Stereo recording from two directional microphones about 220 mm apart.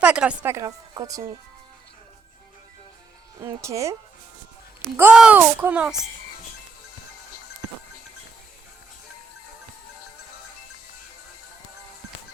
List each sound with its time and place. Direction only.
0.0 s a woman's voice: 5° right (ahead or behind)
3.4 s a woman's voice: 15° right (ahead or behind)
4.9 s a woman's voice: 5° right (ahead or behind)